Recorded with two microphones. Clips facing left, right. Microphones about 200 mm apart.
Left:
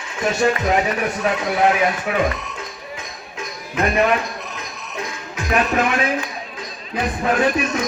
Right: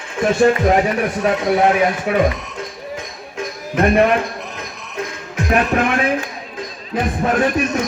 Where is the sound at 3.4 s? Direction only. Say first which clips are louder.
Right 5 dB; 55° right (ahead or behind).